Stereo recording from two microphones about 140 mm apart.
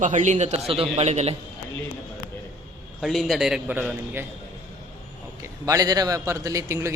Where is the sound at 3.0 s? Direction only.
Centre (ahead or behind).